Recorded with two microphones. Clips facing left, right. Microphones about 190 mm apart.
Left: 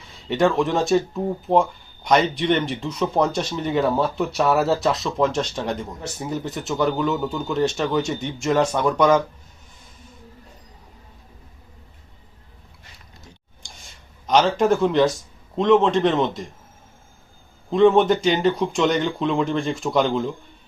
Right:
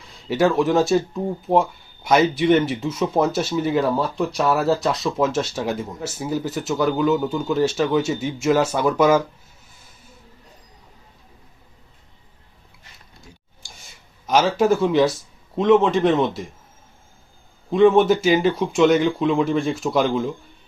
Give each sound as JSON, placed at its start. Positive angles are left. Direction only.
{"t": 0.1, "sound": "speech", "side_deg": 0}
{"t": 14.3, "sound": "speech", "side_deg": -5}
{"t": 17.7, "sound": "speech", "side_deg": 0}